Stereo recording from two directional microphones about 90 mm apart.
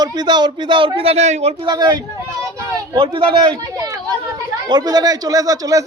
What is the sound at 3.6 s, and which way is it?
Chatter, 40° right (ahead or behind).